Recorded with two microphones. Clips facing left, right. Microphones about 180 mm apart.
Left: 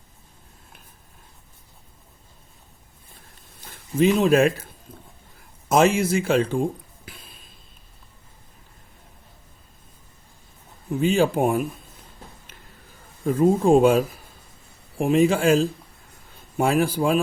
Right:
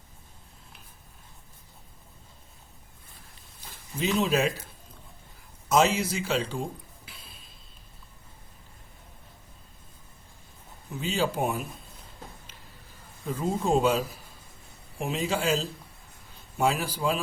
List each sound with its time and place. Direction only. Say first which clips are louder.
3.7 s speech: left 10 dB; 50° left (ahead or behind)
5.6 s speech: left 5 dB; 50° left (ahead or behind)
11.0 s speech: left 8 dB; 55° left (ahead or behind)
13.2 s speech: left 10 dB; 55° left (ahead or behind)